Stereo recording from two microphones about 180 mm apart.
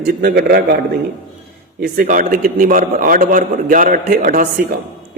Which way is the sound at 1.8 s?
50° right (ahead or behind).